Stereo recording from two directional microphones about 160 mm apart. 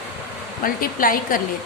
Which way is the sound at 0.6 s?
60° left (ahead or behind).